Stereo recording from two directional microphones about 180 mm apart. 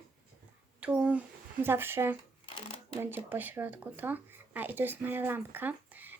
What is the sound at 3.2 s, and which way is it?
Speech, 10° right (ahead or behind).